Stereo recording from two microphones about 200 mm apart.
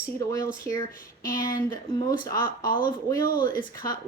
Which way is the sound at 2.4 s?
45° left (ahead or behind).